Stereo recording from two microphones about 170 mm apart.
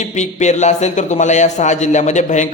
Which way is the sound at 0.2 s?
45° left (ahead or behind).